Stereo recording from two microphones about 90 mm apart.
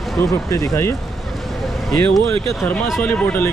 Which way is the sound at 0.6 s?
35° left (ahead or behind).